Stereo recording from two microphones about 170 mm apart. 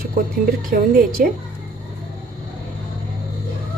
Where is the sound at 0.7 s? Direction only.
60° right (ahead or behind).